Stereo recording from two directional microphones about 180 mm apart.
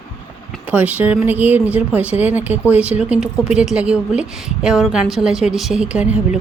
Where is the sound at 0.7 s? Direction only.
10° right (ahead or behind).